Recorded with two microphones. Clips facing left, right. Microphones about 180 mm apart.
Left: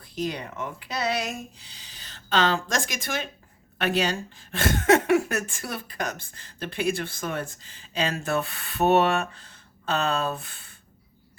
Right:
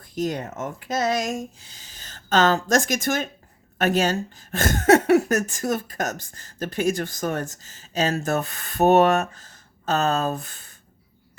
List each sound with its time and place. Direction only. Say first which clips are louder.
0.0 s speech: right 4 dB; 45° right (ahead or behind)